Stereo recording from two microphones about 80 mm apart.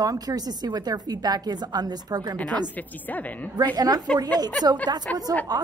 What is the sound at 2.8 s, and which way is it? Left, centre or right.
Speech, left.